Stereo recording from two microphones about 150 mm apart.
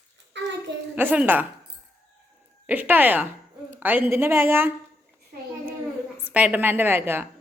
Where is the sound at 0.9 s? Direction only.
10° right (ahead or behind).